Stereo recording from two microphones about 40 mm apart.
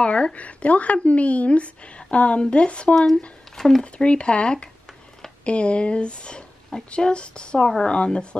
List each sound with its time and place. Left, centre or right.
0.0 s speech: left
3.5 s speech: centre
3.8 s speech: left